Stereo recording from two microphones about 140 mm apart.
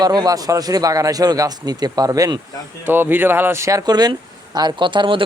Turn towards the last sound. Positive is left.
turn(degrees=-35)  # may be behind; listen again after turning